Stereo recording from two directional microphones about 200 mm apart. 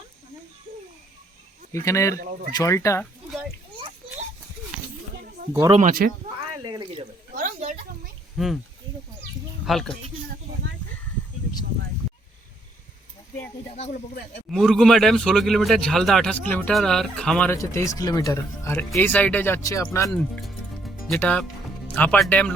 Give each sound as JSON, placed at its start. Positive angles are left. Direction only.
{"t": 1.7, "sound": "speech", "side_deg": 15}
{"t": 5.7, "sound": "speech", "side_deg": -40}
{"t": 6.7, "sound": "speech", "side_deg": -25}
{"t": 7.3, "sound": "a sound", "side_deg": -40}
{"t": 8.4, "sound": "a man's voice", "side_deg": 0}
{"t": 9.6, "sound": "a man's voice", "side_deg": 0}
{"t": 12.0, "sound": "a sound", "side_deg": 0}
{"t": 14.5, "sound": "a man's voice", "side_deg": 0}
{"t": 20.1, "sound": "music", "side_deg": 5}
{"t": 21.9, "sound": "speech", "side_deg": 5}